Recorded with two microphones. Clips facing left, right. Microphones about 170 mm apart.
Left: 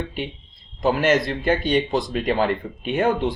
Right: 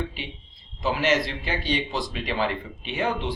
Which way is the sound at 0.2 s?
50° left (ahead or behind).